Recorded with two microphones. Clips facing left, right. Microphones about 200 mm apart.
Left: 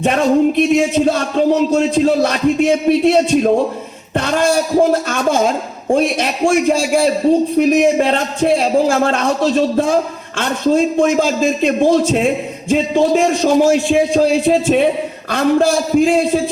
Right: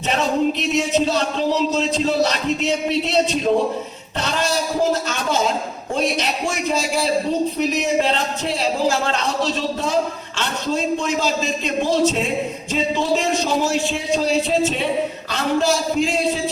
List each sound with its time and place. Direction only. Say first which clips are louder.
0.0 s speech: left 7 dB; 50° left (ahead or behind)